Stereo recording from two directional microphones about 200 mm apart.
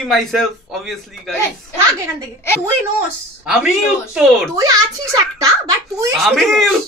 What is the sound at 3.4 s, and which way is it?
A man's voice, 5° right (ahead or behind).